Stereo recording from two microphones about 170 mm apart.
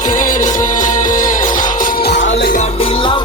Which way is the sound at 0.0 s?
50° left (ahead or behind).